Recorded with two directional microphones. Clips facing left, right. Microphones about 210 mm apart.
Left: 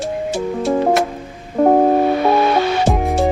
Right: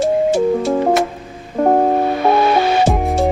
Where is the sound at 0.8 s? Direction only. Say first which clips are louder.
Even; centre (ahead or behind).